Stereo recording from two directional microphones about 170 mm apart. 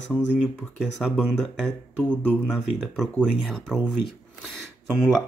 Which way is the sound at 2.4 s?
Centre (ahead or behind).